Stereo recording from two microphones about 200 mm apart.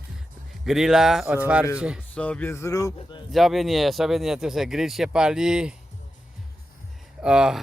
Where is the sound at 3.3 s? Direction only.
Centre (ahead or behind).